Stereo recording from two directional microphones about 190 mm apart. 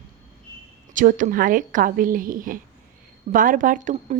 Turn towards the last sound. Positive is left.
turn(degrees=-40)  # may be behind; listen again after turning